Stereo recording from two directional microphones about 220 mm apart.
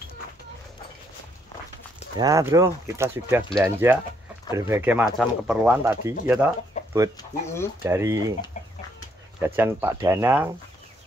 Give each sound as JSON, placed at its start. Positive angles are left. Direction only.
{"t": 2.1, "sound": "speech", "side_deg": -15}
{"t": 6.7, "sound": "chicken", "side_deg": 30}
{"t": 7.8, "sound": "speech", "side_deg": -10}
{"t": 9.4, "sound": "speech", "side_deg": -10}